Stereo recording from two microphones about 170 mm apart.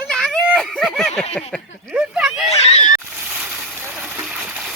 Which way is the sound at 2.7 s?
45° left (ahead or behind).